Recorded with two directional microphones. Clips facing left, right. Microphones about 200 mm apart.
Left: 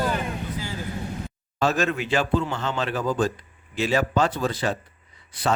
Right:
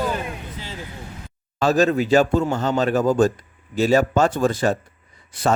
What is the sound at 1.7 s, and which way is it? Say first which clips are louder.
A man's voice: right 8 dB; 35° right (ahead or behind).